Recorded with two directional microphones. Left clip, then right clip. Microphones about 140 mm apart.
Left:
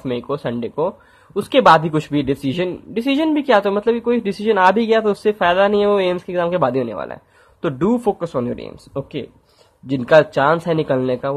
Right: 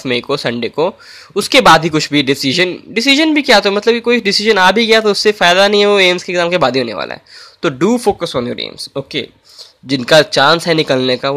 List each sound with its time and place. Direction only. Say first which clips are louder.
0.0 s speech: right 7 dB; 25° right (ahead or behind)